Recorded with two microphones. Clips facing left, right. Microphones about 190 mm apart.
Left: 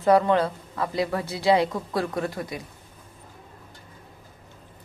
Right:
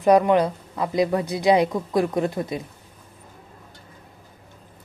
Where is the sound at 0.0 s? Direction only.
15° right (ahead or behind).